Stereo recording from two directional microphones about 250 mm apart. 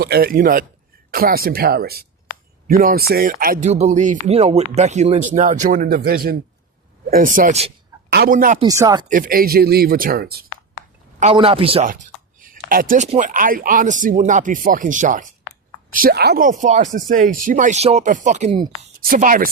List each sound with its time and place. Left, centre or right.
0.0 s a man's voice: right
8.5 s speech: centre
9.0 s speech: right
11.2 s speech: right
12.4 s speech: right
18.9 s speech: right